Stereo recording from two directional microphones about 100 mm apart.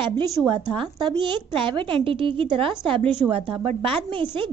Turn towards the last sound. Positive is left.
turn(degrees=-60)  # may be behind; listen again after turning